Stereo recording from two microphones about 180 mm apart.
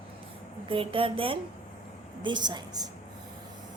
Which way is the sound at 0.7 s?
30° right (ahead or behind).